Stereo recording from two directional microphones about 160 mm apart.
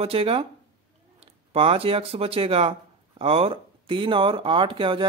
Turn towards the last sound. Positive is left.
turn(degrees=-30)  # may be behind; listen again after turning